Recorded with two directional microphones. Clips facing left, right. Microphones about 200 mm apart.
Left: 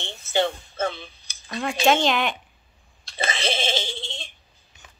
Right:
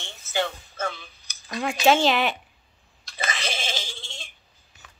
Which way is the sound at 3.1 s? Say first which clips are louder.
Left 4 dB; 30° left (ahead or behind).